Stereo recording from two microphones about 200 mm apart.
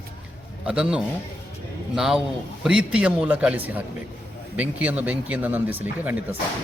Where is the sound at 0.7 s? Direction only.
5° right (ahead or behind).